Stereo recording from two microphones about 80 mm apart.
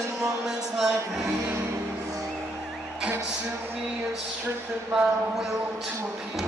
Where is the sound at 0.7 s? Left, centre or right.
Centre.